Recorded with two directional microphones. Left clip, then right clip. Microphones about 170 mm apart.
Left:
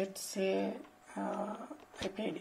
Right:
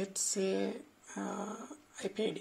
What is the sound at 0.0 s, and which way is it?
Speech, 25° right (ahead or behind).